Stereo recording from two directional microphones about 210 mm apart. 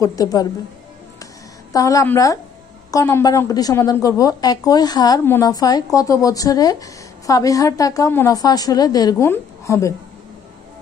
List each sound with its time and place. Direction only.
0.0 s a woman's voice: 15° left (ahead or behind)
1.2 s a sound: 15° left (ahead or behind)
2.9 s a woman's voice: 15° left (ahead or behind)